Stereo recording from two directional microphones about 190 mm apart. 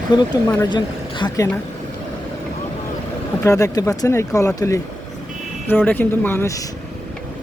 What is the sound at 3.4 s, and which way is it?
Speech, 15° left (ahead or behind).